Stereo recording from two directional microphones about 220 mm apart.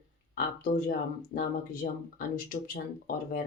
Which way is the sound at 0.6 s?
40° left (ahead or behind).